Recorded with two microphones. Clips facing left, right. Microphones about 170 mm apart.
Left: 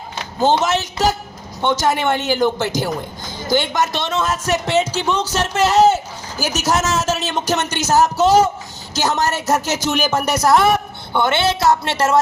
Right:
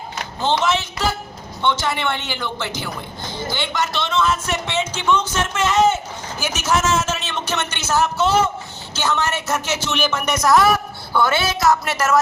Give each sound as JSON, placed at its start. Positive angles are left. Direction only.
{"t": 0.6, "sound": "a man's voice", "side_deg": 40}